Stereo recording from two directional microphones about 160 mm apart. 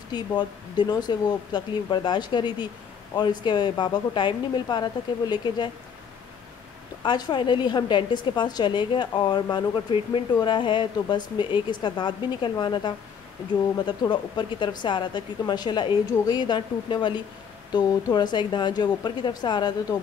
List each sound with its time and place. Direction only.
0.4 s a woman's voice: 25° left (ahead or behind)
7.0 s a woman's voice: 25° left (ahead or behind)